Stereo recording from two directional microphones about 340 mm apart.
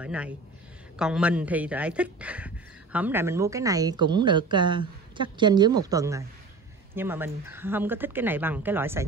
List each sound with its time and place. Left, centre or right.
0.0 s speech: centre